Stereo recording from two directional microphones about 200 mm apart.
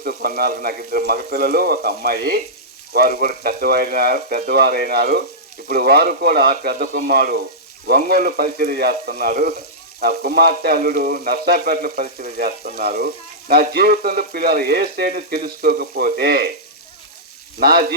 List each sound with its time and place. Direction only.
0.0 s frying: 50° right (ahead or behind)
17.6 s frying: 50° right (ahead or behind)